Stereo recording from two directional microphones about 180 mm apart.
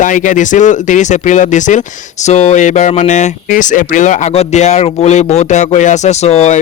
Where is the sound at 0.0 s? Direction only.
45° left (ahead or behind).